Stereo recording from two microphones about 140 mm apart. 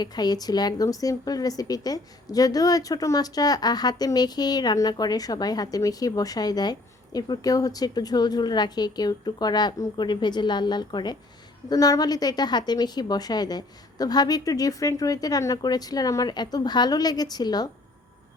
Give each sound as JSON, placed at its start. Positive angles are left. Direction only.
{"t": 0.0, "sound": "a woman's voice", "side_deg": 30}